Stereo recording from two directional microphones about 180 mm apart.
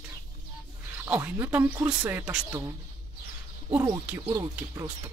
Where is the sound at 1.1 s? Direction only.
10° right (ahead or behind).